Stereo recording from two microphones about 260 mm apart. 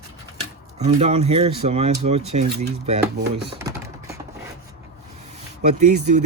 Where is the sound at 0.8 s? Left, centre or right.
Right.